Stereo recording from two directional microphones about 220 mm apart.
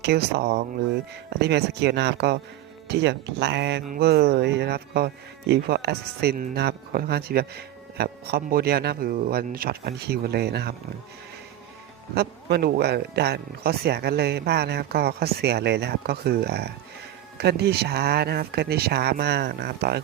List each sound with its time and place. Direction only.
0.0 s speech: 50° right (ahead or behind)
12.1 s speech: 45° right (ahead or behind)